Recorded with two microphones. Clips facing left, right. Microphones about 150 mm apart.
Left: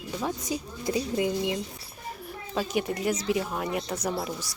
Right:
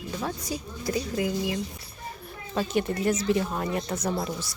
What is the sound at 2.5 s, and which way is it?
Speech, 10° left (ahead or behind).